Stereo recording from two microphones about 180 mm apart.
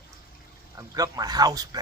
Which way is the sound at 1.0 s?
20° right (ahead or behind).